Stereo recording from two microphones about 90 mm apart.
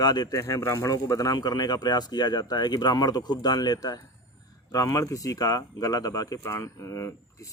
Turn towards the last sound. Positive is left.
turn(degrees=35)  # may be behind; listen again after turning